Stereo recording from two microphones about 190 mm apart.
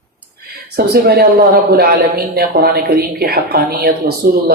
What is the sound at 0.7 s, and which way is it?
A woman's voice, 55° right (ahead or behind).